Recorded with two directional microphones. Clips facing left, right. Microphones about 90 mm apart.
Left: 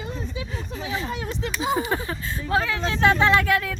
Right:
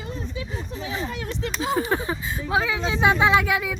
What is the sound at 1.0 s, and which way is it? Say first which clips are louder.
Speech: left 1 dB; 20° left (ahead or behind).